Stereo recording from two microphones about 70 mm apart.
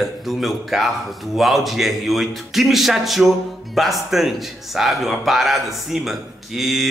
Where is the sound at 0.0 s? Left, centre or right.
Centre.